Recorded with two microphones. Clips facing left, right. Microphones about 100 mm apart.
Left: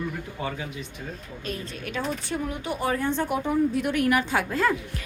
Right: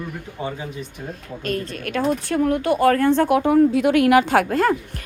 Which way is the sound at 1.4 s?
60° right (ahead or behind).